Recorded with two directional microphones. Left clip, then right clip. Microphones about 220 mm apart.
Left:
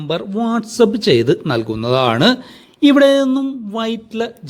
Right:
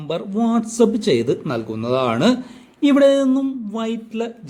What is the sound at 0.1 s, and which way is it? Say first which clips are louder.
Speech: left 2 dB; 20° left (ahead or behind).